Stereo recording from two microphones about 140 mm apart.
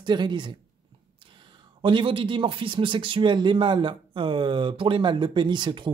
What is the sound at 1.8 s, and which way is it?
A man's voice, 35° right (ahead or behind).